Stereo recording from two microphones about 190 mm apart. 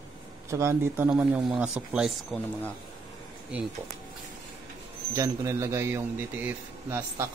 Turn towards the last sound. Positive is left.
turn(degrees=-10)  # may be behind; listen again after turning